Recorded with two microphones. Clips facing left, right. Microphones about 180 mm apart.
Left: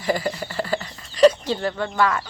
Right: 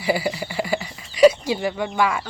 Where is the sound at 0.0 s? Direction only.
10° right (ahead or behind).